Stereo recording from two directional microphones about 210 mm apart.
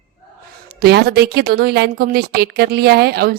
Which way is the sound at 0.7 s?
50° right (ahead or behind).